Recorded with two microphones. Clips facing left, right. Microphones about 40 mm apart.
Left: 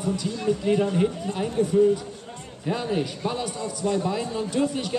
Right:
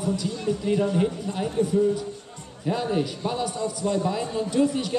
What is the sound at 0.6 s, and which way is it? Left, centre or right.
Speech, centre.